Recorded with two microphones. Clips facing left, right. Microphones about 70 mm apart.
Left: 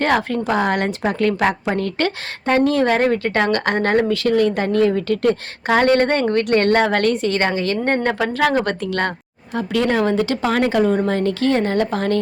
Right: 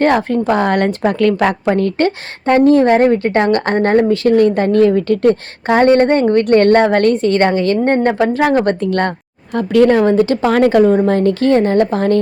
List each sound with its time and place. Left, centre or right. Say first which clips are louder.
0.0 s speech: right 5 dB; right
0.5 s speech: right 4 dB; right
10.0 s speech: right 6 dB; right